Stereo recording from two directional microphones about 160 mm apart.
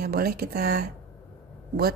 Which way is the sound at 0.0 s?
75° right (ahead or behind).